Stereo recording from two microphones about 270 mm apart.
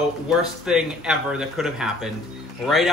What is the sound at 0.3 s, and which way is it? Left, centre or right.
Speech, centre.